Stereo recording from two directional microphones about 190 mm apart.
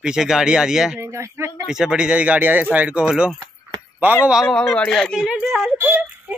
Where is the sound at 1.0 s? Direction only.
15° right (ahead or behind).